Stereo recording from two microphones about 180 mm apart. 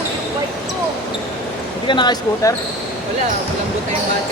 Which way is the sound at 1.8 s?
25° left (ahead or behind).